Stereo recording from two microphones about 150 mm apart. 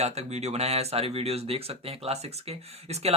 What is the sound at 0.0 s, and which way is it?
Speech, 45° right (ahead or behind).